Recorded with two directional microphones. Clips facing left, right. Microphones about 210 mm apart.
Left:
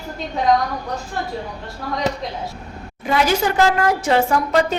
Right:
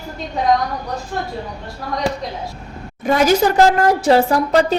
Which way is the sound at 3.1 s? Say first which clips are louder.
Right 4 dB; 45° right (ahead or behind).